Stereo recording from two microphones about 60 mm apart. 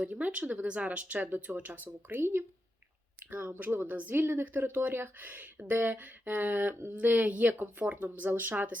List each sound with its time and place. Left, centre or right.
0.0 s speech: right